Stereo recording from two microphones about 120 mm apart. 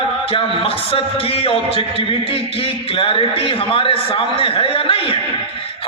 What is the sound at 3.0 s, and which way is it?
A man's voice, 50° left (ahead or behind).